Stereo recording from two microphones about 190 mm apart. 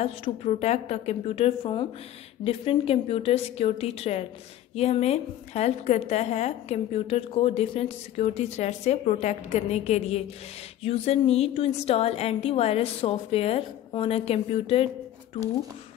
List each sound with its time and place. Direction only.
0.0 s a woman's voice: 35° left (ahead or behind)